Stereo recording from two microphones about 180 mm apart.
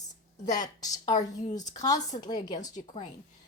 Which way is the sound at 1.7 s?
20° left (ahead or behind).